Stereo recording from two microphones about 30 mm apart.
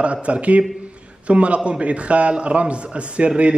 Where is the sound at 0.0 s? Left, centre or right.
Right.